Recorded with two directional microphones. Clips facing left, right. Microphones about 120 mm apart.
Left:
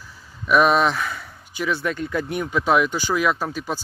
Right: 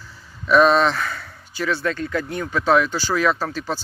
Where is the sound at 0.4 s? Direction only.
10° left (ahead or behind).